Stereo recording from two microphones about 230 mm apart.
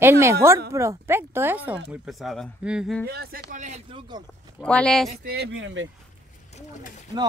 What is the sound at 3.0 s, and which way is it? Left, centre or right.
Speech, right.